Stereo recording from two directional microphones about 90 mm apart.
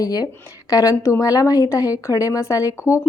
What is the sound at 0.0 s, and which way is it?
A woman's voice, 45° left (ahead or behind).